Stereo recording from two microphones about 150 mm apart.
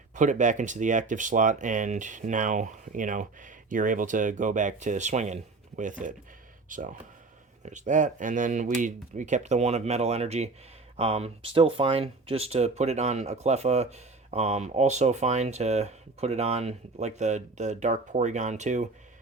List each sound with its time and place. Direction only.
0.1 s speech: 55° right (ahead or behind)